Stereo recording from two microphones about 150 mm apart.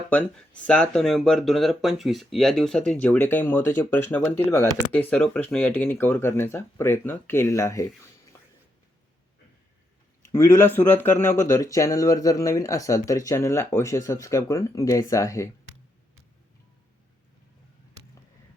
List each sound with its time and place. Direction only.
0.1 s speech: 10° left (ahead or behind)
10.3 s speech: 20° left (ahead or behind)